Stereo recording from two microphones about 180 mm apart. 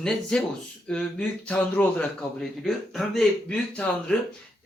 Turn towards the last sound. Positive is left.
turn(degrees=5)  # may be behind; listen again after turning